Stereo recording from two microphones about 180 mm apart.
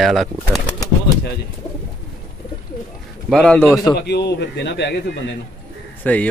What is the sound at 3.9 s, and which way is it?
A man's voice, 65° left (ahead or behind).